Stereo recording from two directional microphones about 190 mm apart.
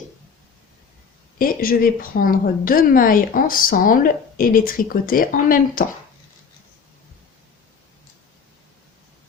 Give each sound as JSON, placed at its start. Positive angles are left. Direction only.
{"t": 1.4, "sound": "a woman's voice", "side_deg": 50}